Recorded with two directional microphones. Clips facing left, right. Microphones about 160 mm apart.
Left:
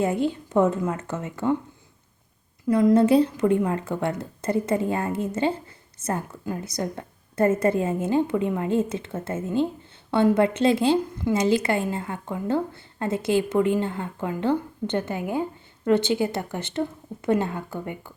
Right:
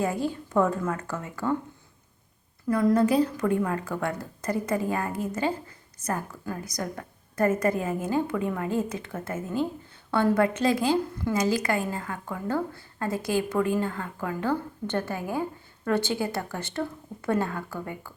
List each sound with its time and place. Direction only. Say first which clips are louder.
0.0 s a woman's voice: left 4 dB; 25° left (ahead or behind)
2.6 s a woman's voice: left 4 dB; 20° left (ahead or behind)